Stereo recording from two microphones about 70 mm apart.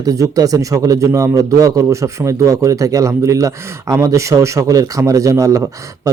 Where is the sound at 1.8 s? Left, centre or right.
Right.